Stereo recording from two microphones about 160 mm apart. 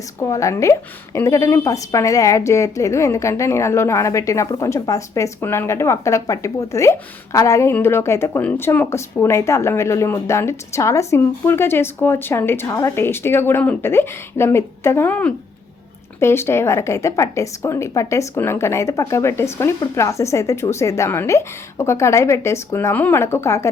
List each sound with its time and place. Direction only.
0.2 s a woman's voice: 20° left (ahead or behind)